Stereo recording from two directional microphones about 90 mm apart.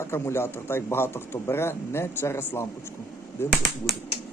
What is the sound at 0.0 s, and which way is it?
A man's voice, 30° left (ahead or behind).